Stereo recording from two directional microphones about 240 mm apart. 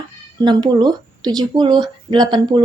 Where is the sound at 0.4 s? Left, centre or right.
Centre.